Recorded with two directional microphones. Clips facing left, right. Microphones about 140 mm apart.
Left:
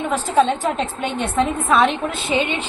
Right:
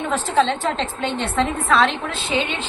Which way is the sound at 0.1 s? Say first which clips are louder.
Left 2 dB; 15° left (ahead or behind).